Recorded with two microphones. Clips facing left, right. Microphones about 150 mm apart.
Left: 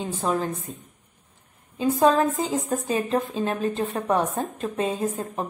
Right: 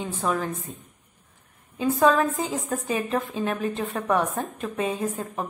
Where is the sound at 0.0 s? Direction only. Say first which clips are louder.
Left 1 dB; 25° left (ahead or behind).